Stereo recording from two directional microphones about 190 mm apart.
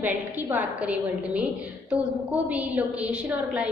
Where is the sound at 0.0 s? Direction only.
10° right (ahead or behind).